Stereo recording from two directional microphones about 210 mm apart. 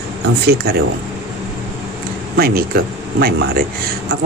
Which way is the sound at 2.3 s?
45° right (ahead or behind).